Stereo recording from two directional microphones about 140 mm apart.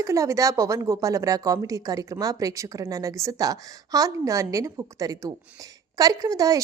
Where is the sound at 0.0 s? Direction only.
20° right (ahead or behind).